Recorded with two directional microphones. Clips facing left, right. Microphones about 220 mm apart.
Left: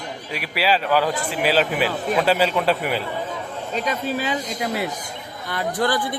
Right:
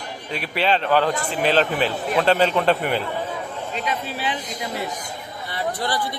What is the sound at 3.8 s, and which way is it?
Speech, 40° left (ahead or behind).